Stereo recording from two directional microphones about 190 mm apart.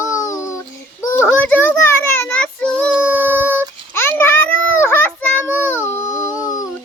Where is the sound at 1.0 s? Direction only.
10° left (ahead or behind).